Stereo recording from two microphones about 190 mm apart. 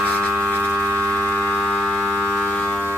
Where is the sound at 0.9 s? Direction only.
10° left (ahead or behind).